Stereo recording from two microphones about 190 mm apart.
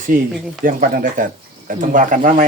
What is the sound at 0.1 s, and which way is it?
Speech, 45° right (ahead or behind).